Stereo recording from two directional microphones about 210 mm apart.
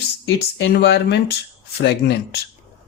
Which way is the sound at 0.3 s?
55° left (ahead or behind).